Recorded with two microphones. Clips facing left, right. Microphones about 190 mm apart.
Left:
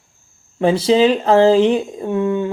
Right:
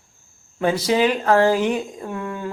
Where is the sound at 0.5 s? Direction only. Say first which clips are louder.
Left 5 dB; 30° left (ahead or behind).